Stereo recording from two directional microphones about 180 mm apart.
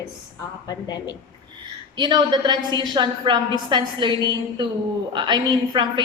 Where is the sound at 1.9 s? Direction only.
25° right (ahead or behind).